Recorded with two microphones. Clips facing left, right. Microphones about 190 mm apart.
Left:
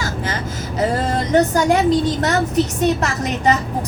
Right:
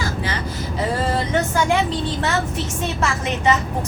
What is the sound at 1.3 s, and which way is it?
A woman's voice, 40° left (ahead or behind).